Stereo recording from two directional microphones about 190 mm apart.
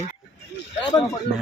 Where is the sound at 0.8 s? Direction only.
20° left (ahead or behind).